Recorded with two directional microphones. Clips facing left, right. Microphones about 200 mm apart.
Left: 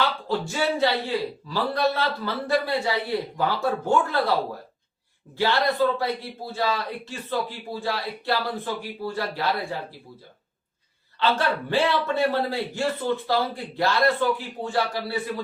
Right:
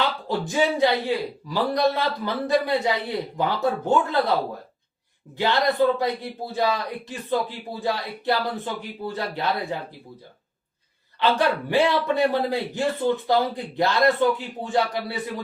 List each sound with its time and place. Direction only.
0.0 s a man's voice: 15° right (ahead or behind)
5.4 s a man's voice: 20° right (ahead or behind)
11.2 s a man's voice: 15° right (ahead or behind)